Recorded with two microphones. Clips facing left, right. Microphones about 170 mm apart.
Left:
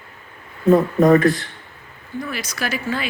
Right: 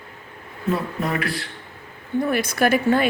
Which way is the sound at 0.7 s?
45° left (ahead or behind).